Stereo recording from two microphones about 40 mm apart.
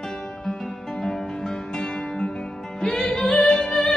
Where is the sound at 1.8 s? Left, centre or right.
Centre.